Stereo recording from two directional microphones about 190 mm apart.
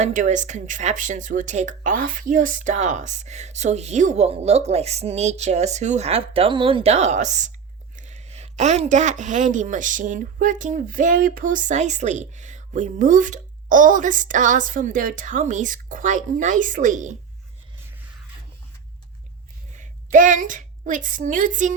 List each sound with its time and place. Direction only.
0.0 s a woman's voice: 40° right (ahead or behind)
19.7 s a woman's voice: 40° right (ahead or behind)